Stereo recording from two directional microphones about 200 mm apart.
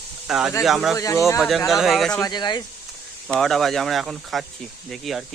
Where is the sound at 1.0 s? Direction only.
15° left (ahead or behind).